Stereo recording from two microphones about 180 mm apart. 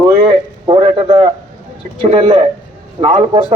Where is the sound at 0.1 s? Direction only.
30° right (ahead or behind).